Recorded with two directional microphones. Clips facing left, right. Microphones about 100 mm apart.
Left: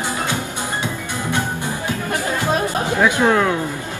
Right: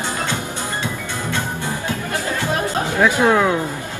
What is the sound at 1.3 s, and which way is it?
Music, 15° left (ahead or behind).